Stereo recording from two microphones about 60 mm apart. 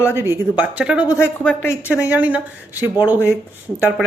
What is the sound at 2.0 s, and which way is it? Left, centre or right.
Speech, right.